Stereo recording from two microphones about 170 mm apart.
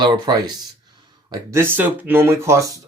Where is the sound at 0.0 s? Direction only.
25° right (ahead or behind).